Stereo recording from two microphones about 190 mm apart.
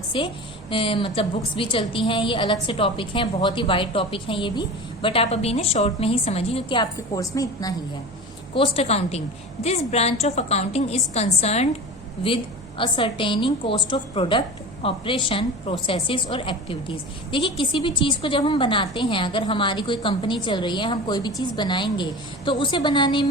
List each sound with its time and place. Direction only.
0.1 s a woman's voice: 25° left (ahead or behind)
8.5 s a woman's voice: 30° left (ahead or behind)